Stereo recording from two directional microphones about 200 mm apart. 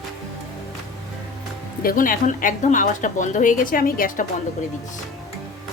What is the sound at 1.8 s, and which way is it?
A woman's voice, 45° left (ahead or behind).